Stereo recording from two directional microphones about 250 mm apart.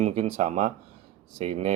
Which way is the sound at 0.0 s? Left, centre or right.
Right.